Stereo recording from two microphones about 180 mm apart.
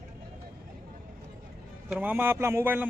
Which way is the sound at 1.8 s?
5° right (ahead or behind).